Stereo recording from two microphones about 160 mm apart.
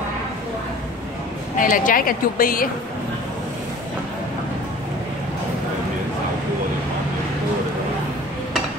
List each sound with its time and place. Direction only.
1.6 s speech: 60° left (ahead or behind)